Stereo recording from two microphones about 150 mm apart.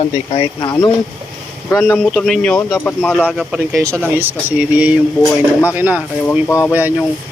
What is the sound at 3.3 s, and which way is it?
Speech, centre (ahead or behind).